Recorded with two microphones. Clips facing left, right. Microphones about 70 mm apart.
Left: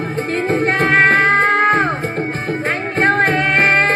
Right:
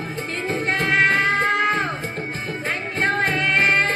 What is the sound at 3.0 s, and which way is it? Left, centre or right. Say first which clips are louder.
Music: left 6 dB; left.